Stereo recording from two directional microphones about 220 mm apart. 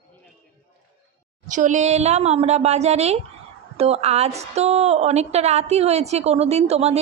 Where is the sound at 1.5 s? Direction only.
35° right (ahead or behind).